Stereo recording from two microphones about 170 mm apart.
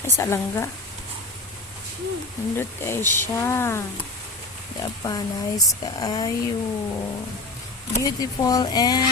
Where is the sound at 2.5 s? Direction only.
15° left (ahead or behind).